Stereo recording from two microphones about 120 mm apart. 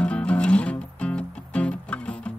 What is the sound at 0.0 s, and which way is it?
Music, 10° left (ahead or behind).